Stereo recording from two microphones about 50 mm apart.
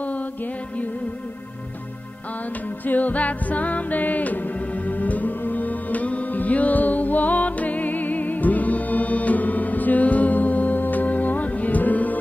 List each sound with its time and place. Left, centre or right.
2.9 s music: left